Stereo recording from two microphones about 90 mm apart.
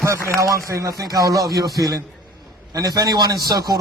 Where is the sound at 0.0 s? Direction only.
35° right (ahead or behind).